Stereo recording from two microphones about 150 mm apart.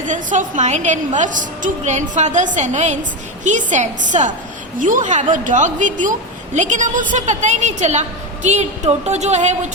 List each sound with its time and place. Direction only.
0.1 s a woman's voice: 55° right (ahead or behind)